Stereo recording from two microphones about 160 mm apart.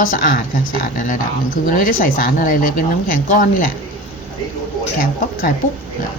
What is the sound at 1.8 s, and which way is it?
Speech, 60° left (ahead or behind).